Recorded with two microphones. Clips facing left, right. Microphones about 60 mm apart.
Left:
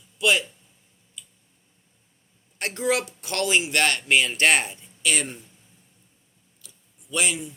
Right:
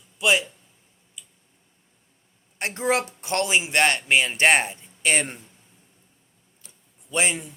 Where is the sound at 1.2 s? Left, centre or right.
Centre.